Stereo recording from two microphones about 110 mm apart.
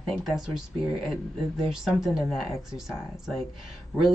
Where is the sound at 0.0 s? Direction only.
Centre (ahead or behind).